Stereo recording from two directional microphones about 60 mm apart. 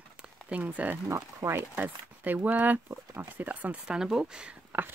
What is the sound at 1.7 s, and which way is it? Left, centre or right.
Speech, right.